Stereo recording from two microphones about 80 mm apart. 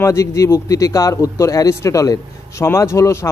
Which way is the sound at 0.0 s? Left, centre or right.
Left.